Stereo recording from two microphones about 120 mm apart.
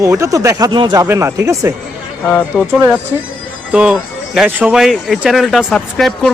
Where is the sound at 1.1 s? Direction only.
25° right (ahead or behind).